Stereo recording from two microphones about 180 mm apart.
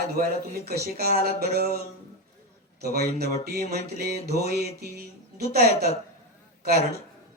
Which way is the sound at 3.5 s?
55° right (ahead or behind).